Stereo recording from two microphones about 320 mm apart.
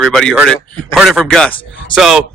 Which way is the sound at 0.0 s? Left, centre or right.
Centre.